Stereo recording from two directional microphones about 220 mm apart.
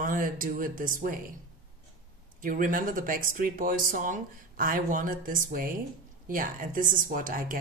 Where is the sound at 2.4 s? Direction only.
40° right (ahead or behind).